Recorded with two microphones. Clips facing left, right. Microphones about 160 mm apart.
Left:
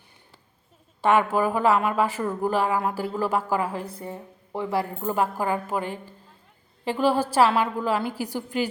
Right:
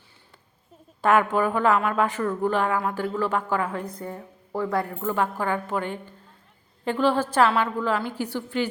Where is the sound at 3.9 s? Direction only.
25° left (ahead or behind).